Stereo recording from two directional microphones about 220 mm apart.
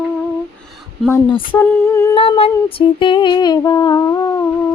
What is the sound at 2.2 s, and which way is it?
Humming, 25° left (ahead or behind).